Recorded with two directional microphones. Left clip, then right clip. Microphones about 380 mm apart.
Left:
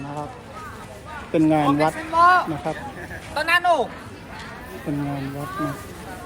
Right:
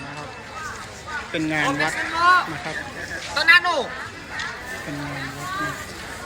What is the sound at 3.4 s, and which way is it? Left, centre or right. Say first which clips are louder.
Speech: right 2 dB; left.